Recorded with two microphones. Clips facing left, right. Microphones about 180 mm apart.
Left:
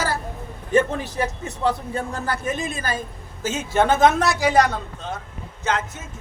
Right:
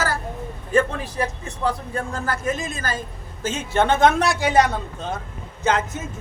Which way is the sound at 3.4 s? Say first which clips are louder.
Left 1 dB; 10° left (ahead or behind).